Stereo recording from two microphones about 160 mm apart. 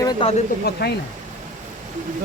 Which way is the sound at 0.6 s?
90° left.